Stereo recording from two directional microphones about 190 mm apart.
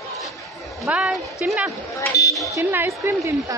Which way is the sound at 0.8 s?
5° right (ahead or behind).